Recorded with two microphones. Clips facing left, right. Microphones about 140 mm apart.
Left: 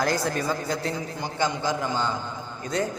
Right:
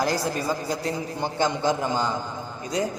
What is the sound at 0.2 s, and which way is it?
Speech, 10° right (ahead or behind).